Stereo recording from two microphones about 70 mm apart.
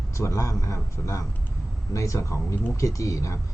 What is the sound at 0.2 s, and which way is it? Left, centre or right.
Speech, left.